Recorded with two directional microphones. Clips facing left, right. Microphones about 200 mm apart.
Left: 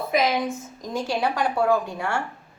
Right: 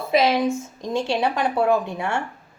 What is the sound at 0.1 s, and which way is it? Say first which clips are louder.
A woman's voice: right 5 dB; 30° right (ahead or behind).